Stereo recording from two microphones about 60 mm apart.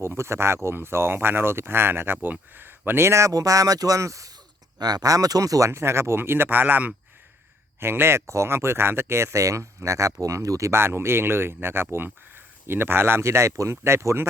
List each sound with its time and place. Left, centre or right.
0.0 s speech: right
4.8 s speech: right
10.7 s speech: right